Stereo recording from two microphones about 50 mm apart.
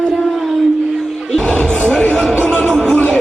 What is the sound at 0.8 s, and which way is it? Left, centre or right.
Music, centre.